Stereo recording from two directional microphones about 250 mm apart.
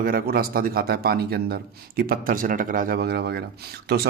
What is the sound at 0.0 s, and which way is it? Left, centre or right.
Speech, right.